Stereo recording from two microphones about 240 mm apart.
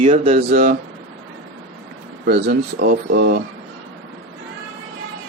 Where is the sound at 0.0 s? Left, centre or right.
Right.